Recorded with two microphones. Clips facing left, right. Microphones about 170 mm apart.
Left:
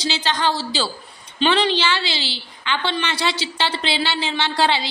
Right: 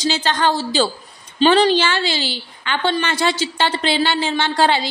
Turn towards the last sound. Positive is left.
turn(degrees=-45)  # may be behind; listen again after turning